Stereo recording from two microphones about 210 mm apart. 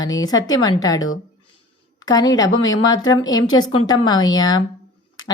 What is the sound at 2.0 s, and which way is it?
A woman's voice, 20° left (ahead or behind).